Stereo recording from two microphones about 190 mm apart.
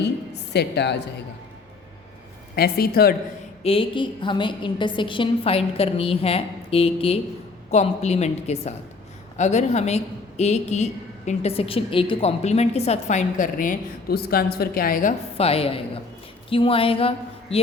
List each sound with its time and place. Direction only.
0.5 s a woman's voice: 65° left (ahead or behind)
2.6 s a woman's voice: 55° left (ahead or behind)
3.6 s a woman's voice: 30° left (ahead or behind); by 15.1 s 50° left (ahead or behind)
15.4 s a woman's voice: 30° left (ahead or behind)